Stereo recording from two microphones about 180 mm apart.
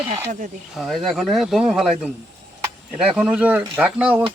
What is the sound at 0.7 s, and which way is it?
Speech, centre (ahead or behind).